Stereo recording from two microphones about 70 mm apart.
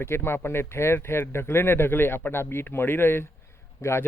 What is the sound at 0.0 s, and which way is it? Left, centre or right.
Speech, left.